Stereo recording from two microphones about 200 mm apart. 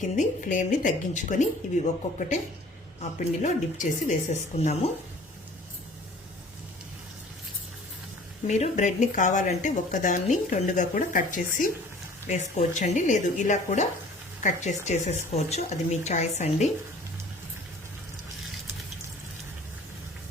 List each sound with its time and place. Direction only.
0.2 s speech: 40° left (ahead or behind)
8.4 s speech: 35° left (ahead or behind)